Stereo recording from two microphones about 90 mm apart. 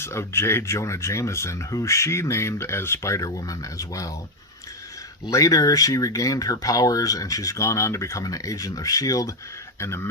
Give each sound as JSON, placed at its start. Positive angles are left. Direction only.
{"t": 0.0, "sound": "speech", "side_deg": 30}
{"t": 5.3, "sound": "speech", "side_deg": 40}